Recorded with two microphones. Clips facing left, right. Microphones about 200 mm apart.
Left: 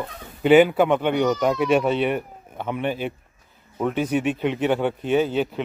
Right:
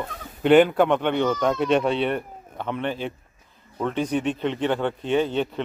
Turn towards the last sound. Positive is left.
turn(degrees=5)  # may be behind; listen again after turning